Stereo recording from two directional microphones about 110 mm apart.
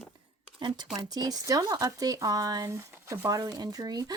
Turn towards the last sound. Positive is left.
turn(degrees=-35)  # may be behind; listen again after turning